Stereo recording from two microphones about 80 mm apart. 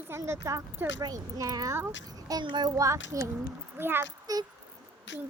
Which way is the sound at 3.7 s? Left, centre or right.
Right.